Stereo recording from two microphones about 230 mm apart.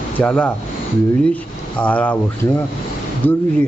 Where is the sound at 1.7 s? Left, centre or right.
Centre.